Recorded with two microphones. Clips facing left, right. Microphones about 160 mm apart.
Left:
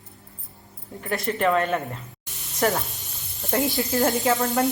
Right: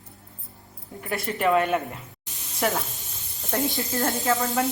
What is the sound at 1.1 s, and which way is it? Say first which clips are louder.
A woman's voice: even; centre (ahead or behind).